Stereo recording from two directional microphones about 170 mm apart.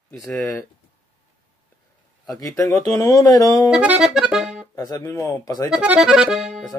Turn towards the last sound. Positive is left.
turn(degrees=0)  # may be behind; listen again after turning